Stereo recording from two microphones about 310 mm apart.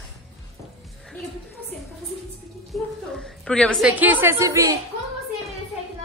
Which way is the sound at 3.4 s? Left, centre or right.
Centre.